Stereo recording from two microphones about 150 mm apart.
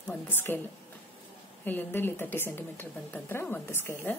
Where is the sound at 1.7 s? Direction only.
15° left (ahead or behind).